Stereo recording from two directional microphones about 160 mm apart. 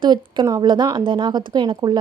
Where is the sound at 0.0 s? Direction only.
25° right (ahead or behind).